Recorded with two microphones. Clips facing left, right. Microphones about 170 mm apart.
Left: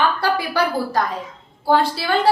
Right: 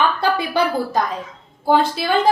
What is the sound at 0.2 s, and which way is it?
A woman's voice, 20° right (ahead or behind).